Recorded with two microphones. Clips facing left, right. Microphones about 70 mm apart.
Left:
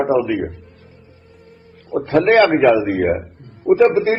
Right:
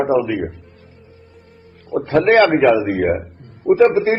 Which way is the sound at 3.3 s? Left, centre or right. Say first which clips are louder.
Left 1 dB; right.